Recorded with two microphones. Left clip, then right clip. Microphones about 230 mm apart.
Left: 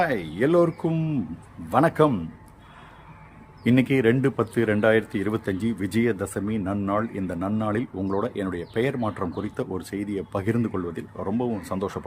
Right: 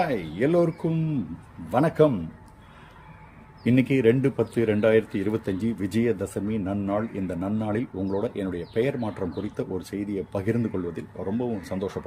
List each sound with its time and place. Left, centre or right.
0.0 s speech: centre
3.6 s speech: centre